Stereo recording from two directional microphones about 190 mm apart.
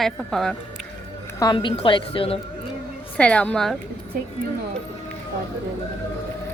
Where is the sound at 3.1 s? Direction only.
5° left (ahead or behind).